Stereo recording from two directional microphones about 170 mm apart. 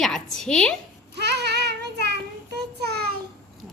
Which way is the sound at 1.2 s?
80° right.